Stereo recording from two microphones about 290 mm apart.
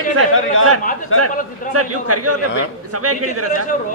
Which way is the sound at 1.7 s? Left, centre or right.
Right.